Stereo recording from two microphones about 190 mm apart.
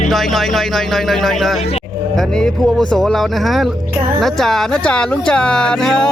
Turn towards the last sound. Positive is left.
turn(degrees=5)  # may be behind; listen again after turning